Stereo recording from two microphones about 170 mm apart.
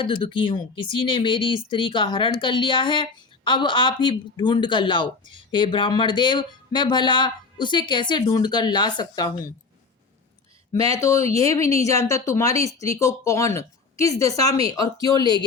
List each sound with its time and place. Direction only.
0.0 s a woman's voice: 30° left (ahead or behind)
10.8 s a woman's voice: 20° left (ahead or behind)